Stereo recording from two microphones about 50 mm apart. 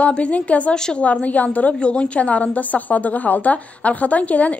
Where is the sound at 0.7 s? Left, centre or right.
Centre.